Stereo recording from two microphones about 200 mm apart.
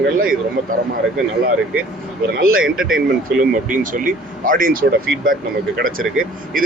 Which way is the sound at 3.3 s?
45° right (ahead or behind).